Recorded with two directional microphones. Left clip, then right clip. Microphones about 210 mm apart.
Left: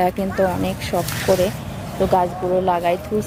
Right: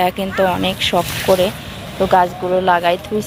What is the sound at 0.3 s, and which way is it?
Speech, 15° right (ahead or behind).